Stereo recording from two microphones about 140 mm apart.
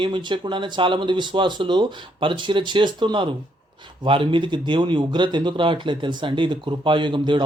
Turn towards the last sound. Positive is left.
turn(degrees=-35)  # may be behind; listen again after turning